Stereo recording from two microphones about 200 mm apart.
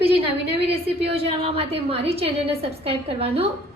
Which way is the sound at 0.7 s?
30° right (ahead or behind).